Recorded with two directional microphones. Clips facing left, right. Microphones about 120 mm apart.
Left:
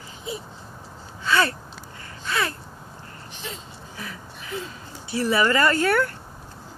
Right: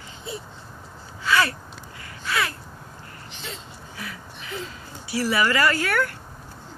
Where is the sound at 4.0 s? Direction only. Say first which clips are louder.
Even; 30° left (ahead or behind).